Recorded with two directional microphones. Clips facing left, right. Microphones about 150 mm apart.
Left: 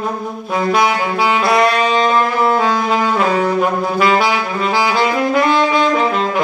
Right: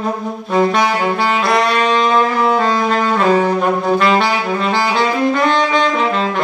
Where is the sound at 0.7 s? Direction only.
5° left (ahead or behind).